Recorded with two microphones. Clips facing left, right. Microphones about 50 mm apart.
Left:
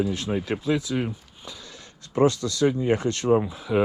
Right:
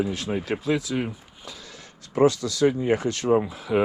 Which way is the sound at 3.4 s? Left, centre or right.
Right.